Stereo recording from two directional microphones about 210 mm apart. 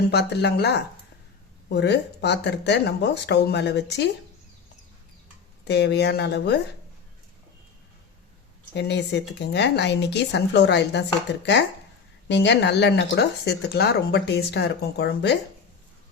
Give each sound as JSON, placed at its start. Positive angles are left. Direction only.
{"t": 0.1, "sound": "speech", "side_deg": 55}
{"t": 5.6, "sound": "speech", "side_deg": 55}
{"t": 8.7, "sound": "speech", "side_deg": 55}